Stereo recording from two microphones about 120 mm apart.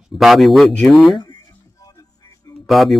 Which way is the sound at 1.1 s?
35° left (ahead or behind).